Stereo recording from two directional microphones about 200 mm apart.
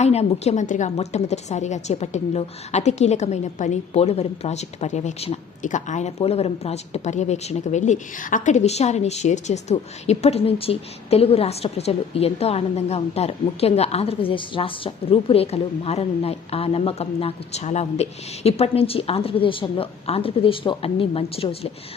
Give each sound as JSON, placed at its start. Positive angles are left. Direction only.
{"t": 0.0, "sound": "speech", "side_deg": 30}